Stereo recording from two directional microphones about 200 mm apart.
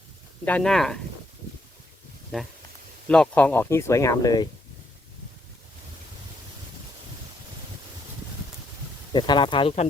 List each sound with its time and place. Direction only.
0.4 s speech: 5° left (ahead or behind)
3.1 s speech: 5° left (ahead or behind)
9.1 s speech: 20° left (ahead or behind)